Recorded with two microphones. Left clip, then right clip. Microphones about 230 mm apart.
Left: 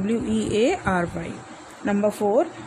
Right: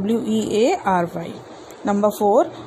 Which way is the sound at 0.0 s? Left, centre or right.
Centre.